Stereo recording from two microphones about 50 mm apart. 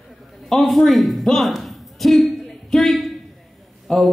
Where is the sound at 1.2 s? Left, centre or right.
Centre.